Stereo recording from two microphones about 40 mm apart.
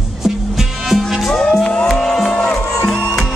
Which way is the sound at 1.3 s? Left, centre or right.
Centre.